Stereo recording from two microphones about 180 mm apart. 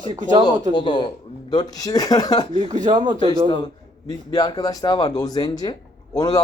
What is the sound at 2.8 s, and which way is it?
Speech, 25° right (ahead or behind).